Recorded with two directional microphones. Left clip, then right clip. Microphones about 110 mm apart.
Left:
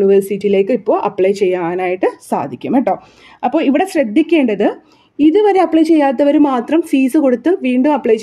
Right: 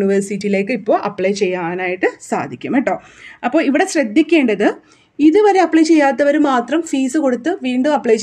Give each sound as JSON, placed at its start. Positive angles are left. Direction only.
{"t": 0.0, "sound": "speech", "side_deg": 15}
{"t": 0.8, "sound": "a woman's voice", "side_deg": 10}